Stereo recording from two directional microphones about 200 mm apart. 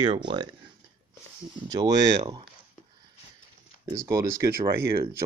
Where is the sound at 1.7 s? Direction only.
20° right (ahead or behind).